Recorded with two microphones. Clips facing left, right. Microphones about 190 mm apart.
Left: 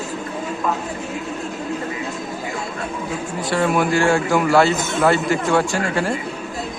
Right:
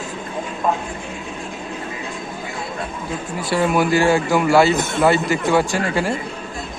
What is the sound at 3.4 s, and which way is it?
A man's voice, 5° right (ahead or behind).